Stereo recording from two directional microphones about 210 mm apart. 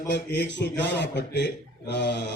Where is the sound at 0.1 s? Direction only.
55° left (ahead or behind).